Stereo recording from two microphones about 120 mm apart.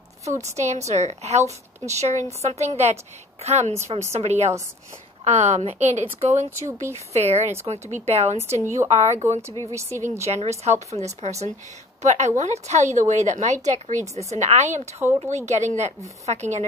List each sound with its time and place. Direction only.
0.2 s speech: 70° right (ahead or behind)
2.4 s speech: 60° right (ahead or behind)
9.5 s speech: 25° left (ahead or behind)
10.2 s a woman's voice: 65° right (ahead or behind)
15.0 s speech: 15° right (ahead or behind)
15.3 s speech: 70° right (ahead or behind)